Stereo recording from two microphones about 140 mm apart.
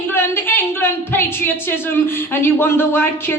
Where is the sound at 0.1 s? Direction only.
15° left (ahead or behind).